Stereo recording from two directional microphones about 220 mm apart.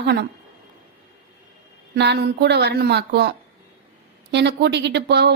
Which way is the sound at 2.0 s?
50° right (ahead or behind).